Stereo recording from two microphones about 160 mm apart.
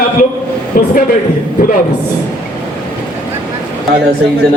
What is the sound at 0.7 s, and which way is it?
Speech, 65° left (ahead or behind).